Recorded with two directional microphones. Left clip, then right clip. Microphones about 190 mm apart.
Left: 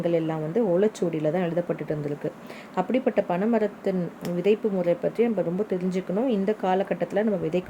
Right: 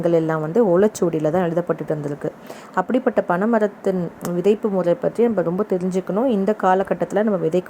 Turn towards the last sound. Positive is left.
turn(degrees=-20)  # may be behind; listen again after turning